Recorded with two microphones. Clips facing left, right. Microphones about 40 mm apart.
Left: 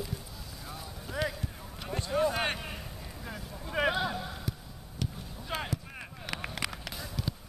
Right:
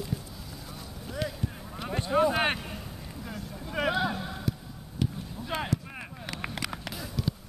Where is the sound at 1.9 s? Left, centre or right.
Right.